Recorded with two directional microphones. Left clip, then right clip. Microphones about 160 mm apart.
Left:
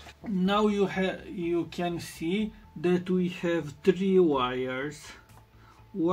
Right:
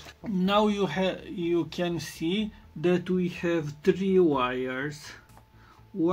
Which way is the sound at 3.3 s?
15° right (ahead or behind).